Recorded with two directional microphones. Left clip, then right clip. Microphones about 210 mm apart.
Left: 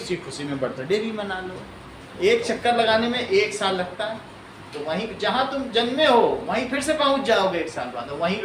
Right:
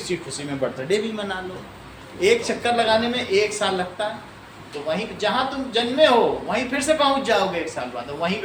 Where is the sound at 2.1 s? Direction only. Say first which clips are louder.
Right 1 dB; 20° right (ahead or behind).